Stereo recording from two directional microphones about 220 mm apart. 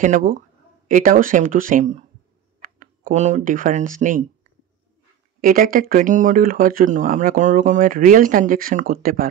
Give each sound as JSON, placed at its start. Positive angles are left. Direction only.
{"t": 0.0, "sound": "speech", "side_deg": -35}
{"t": 5.4, "sound": "speech", "side_deg": -40}